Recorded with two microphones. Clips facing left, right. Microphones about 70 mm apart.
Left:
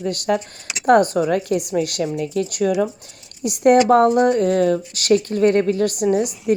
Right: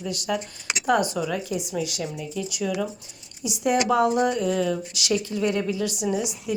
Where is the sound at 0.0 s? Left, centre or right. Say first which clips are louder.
Left 7 dB; left.